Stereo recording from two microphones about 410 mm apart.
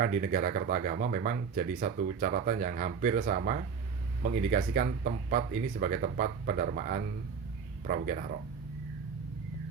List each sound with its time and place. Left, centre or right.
0.0 s speech: centre